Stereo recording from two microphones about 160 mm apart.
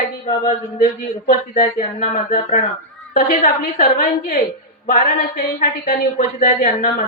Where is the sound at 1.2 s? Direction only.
60° left (ahead or behind).